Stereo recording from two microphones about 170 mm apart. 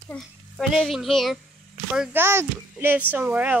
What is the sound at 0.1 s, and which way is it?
A child's voice, 5° left (ahead or behind).